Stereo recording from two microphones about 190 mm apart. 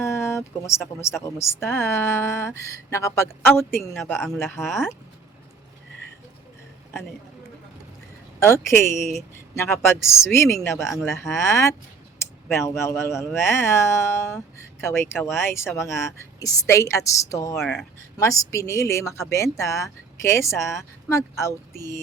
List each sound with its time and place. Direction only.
0.0 s speech: 15° left (ahead or behind)
4.6 s speech: centre (ahead or behind)
8.4 s speech: 15° left (ahead or behind)
17.6 s speech: centre (ahead or behind)
18.2 s speech: 15° left (ahead or behind)